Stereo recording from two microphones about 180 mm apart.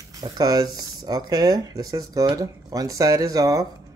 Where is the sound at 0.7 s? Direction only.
20° right (ahead or behind).